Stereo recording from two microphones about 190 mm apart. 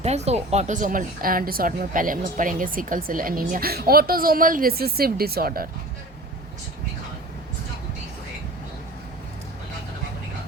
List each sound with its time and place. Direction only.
0.0 s speech: 35° right (ahead or behind); by 5.6 s 50° right (ahead or behind)